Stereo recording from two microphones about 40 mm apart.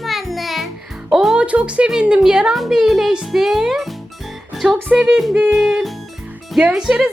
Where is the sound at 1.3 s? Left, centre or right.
Right.